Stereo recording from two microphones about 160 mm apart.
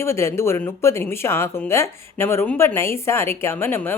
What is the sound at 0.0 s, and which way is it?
Speech, 15° left (ahead or behind).